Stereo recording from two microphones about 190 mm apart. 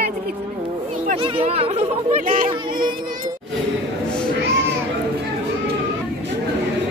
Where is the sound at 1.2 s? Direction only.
30° right (ahead or behind).